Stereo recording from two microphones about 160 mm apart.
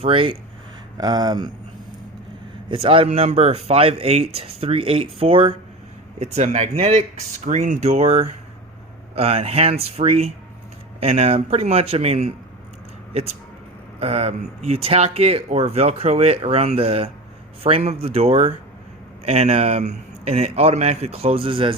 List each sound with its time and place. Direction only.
0.0 s speech: 35° right (ahead or behind)
0.9 s speech: 25° right (ahead or behind)
2.6 s speech: 35° right (ahead or behind)
14.0 s speech: 40° right (ahead or behind)